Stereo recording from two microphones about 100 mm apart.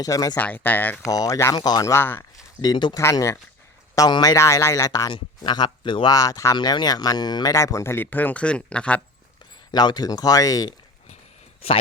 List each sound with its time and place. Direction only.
0.0 s speech: 35° left (ahead or behind)
0.3 s speech: 15° left (ahead or behind)
1.0 s speech: 35° left (ahead or behind)
1.6 s speech: 45° left (ahead or behind)
1.9 s speech: 20° left (ahead or behind)
2.6 s speech: 45° left (ahead or behind)
3.0 s speech: 30° left (ahead or behind)
5.1 s speech: 45° left (ahead or behind)
6.1 s speech: 35° left (ahead or behind); by 9.0 s 10° left (ahead or behind)
9.7 s speech: 45° left (ahead or behind)